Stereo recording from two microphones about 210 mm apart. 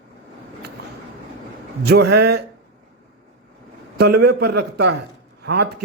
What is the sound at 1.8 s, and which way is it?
Speech, 50° right (ahead or behind).